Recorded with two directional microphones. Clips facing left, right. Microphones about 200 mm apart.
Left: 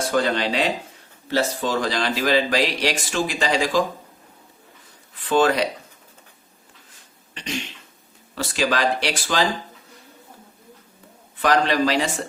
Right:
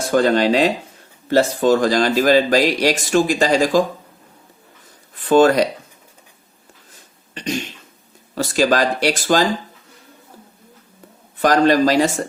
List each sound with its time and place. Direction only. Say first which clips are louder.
0.1 s speech: right 9 dB; 45° right (ahead or behind)
5.1 s speech: right 6 dB; 45° right (ahead or behind)
7.3 s a sound: right 6 dB; 40° right (ahead or behind)
8.4 s speech: right 6 dB; 45° right (ahead or behind)
11.3 s speech: right 5 dB; 40° right (ahead or behind)